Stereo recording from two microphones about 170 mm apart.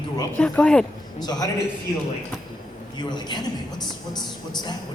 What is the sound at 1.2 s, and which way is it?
Speech, 25° left (ahead or behind).